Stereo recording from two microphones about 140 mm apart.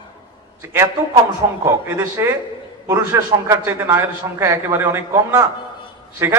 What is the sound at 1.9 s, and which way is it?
A man's voice, 20° right (ahead or behind).